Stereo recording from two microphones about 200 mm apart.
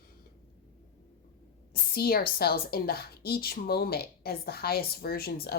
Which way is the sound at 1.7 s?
50° left (ahead or behind).